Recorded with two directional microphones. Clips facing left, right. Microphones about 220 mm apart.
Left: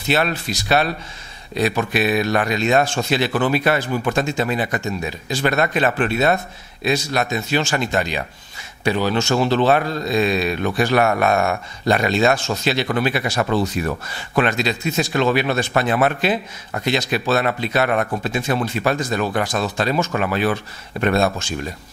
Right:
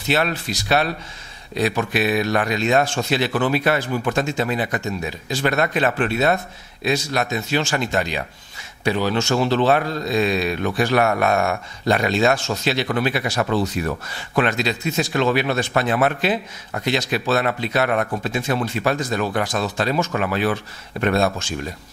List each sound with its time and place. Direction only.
0.1 s a man's voice: 15° left (ahead or behind)